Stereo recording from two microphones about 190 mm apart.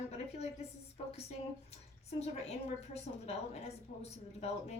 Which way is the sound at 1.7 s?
35° left (ahead or behind).